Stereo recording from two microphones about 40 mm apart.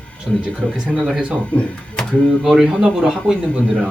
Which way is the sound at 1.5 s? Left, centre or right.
Left.